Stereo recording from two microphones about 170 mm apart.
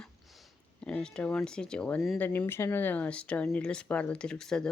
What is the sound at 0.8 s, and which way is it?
Speech, 5° left (ahead or behind).